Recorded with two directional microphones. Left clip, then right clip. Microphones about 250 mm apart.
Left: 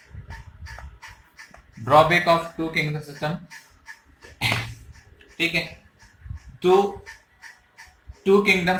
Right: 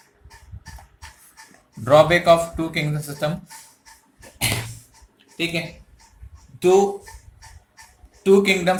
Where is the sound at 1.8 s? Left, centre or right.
Right.